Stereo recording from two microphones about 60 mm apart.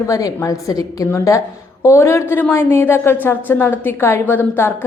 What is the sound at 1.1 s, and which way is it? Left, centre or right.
A woman's voice, left.